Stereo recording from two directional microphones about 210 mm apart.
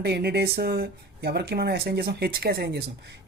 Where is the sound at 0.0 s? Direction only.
50° right (ahead or behind).